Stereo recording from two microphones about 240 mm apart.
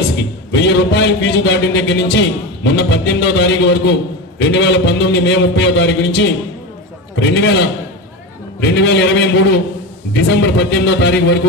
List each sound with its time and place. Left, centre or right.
0.5 s a man's voice: left